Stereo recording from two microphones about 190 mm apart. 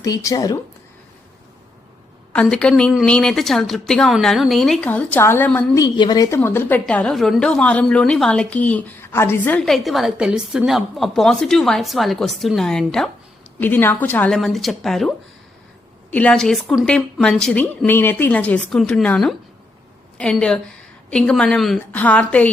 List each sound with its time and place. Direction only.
0.0 s speech: 15° left (ahead or behind)
2.3 s a woman's voice: 5° left (ahead or behind)
16.1 s a woman's voice: 5° left (ahead or behind)